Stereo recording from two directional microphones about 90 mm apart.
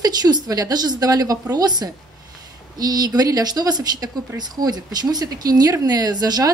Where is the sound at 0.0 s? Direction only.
45° right (ahead or behind).